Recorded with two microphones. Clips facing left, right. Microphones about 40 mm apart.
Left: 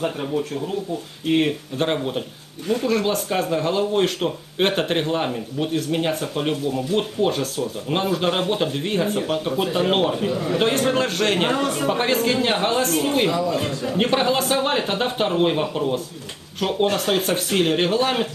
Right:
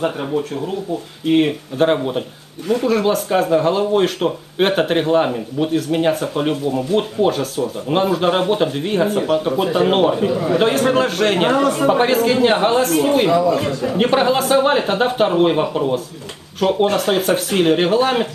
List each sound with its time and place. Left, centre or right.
0.3 s speech: centre
11.6 s a woman's voice: right
11.9 s speech: centre
13.3 s a man's voice: right
13.8 s speech: centre